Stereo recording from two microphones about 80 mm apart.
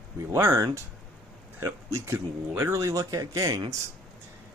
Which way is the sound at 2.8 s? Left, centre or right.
Right.